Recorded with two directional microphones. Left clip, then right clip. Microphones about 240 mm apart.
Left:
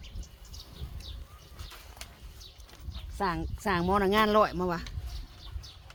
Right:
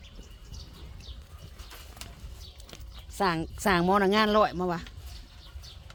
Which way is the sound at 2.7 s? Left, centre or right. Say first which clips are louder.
Right 2 dB; right.